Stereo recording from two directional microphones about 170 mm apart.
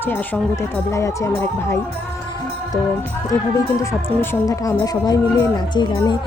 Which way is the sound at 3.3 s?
20° left (ahead or behind).